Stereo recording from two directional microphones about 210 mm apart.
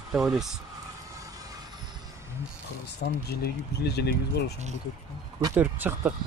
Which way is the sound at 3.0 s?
50° left (ahead or behind).